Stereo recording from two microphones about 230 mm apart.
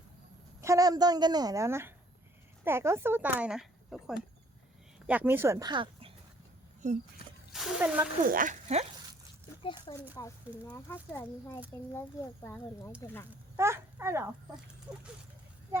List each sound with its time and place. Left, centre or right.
0.6 s speech: centre; by 7.0 s right
7.2 s a sound: left
7.5 s speech: centre
8.2 s speech: right
9.6 s speech: centre
13.6 s a child's voice: centre